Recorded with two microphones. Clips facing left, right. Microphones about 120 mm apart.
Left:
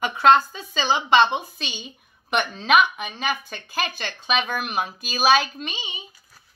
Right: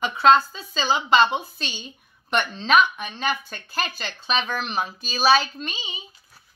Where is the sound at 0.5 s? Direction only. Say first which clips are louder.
Left 1 dB; 5° left (ahead or behind).